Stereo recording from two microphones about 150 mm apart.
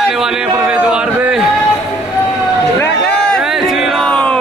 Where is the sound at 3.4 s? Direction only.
5° right (ahead or behind).